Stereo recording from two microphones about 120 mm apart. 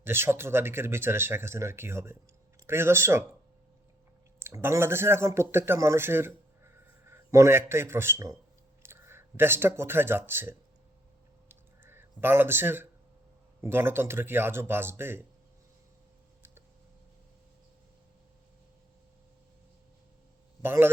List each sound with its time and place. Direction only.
0.0 s speech: 20° right (ahead or behind)
4.4 s a man's voice: 20° right (ahead or behind)
11.4 s a sound: 20° right (ahead or behind)
13.6 s speech: 20° right (ahead or behind)
20.6 s a man's voice: 20° right (ahead or behind)